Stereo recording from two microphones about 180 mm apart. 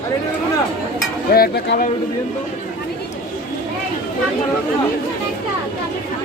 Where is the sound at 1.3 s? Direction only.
55° left (ahead or behind).